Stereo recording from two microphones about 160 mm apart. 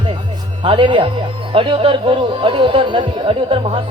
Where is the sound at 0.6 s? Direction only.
30° right (ahead or behind).